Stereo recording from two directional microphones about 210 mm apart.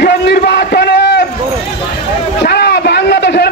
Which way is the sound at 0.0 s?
55° left (ahead or behind).